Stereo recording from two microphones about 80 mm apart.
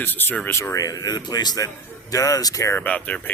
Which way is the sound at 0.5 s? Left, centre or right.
Left.